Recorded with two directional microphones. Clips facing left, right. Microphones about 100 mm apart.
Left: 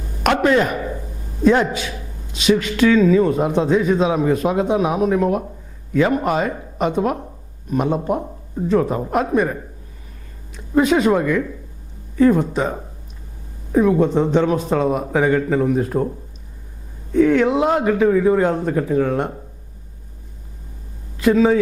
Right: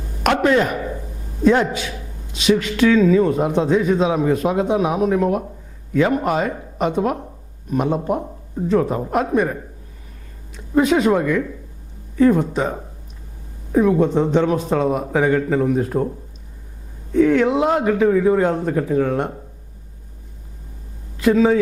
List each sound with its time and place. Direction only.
0.3 s a man's voice: 15° left (ahead or behind)
2.3 s speech: centre (ahead or behind); by 16.1 s 20° left (ahead or behind)
17.2 s speech: 15° left (ahead or behind)
21.2 s speech: 15° left (ahead or behind)